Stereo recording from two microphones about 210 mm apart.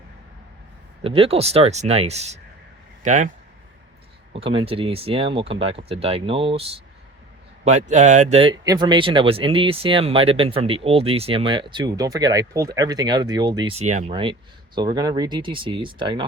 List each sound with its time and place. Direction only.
1.0 s speech: 25° right (ahead or behind)
4.4 s speech: 25° right (ahead or behind)
13.7 s speech: 30° right (ahead or behind)